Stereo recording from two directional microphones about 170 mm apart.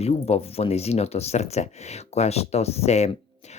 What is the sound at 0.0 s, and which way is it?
Speech, 35° left (ahead or behind).